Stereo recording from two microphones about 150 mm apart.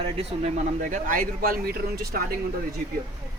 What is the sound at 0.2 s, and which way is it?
Speech, 55° right (ahead or behind).